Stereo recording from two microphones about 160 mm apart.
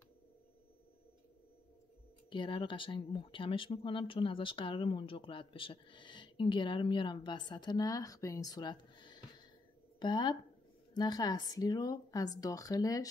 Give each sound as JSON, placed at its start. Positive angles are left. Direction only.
{"t": 2.2, "sound": "speech", "side_deg": 30}